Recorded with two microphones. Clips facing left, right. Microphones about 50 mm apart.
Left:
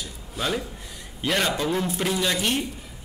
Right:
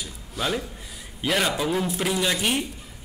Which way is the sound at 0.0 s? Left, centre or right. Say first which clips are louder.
Even; centre.